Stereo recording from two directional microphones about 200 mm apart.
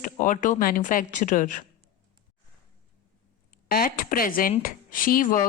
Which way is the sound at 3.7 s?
45° left (ahead or behind).